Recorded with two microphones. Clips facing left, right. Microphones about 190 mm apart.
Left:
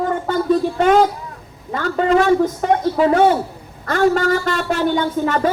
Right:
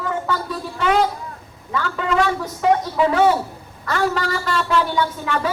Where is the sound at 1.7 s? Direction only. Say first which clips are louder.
Left 6 dB; 40° left (ahead or behind).